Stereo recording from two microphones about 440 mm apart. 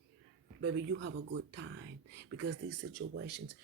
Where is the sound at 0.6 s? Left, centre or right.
Right.